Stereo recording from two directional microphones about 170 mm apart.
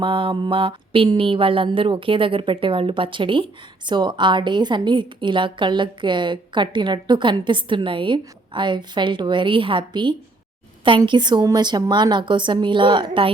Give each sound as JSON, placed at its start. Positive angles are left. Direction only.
{"t": 0.0, "sound": "mantra", "side_deg": -30}